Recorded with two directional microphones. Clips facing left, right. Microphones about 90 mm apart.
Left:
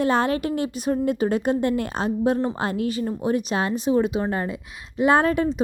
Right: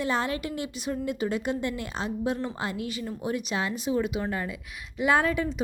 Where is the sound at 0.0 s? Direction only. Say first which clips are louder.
Left 7 dB; 50° left (ahead or behind).